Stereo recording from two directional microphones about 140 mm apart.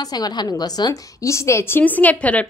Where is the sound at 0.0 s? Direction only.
30° left (ahead or behind).